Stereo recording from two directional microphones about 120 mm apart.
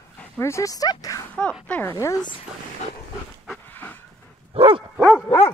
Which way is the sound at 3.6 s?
15° left (ahead or behind).